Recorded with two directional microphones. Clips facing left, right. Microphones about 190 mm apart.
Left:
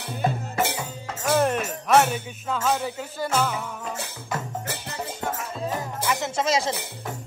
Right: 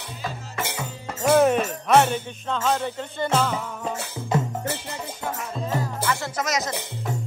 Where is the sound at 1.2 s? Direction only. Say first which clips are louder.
Right 4 dB; centre (ahead or behind).